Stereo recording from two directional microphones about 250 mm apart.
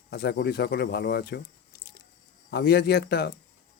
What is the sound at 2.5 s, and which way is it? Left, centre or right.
Speech, left.